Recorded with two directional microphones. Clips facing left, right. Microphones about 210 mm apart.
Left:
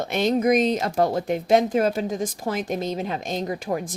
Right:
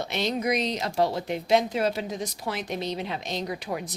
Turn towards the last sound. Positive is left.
turn(degrees=45)  # may be behind; listen again after turning